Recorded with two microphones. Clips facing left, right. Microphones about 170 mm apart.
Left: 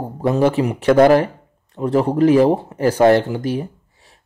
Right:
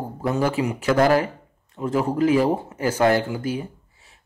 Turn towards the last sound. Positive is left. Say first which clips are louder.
# left 2 dB
turn(degrees=35)  # may be behind; listen again after turning